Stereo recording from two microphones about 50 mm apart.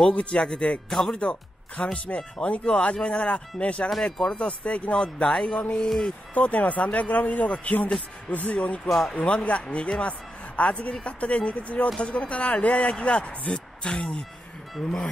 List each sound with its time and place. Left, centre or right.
0.1 s speech: left
1.1 s speech: left
4.0 s speech: centre
4.4 s speech: left
6.3 s speech: left
8.9 s speech: centre
9.2 s speech: left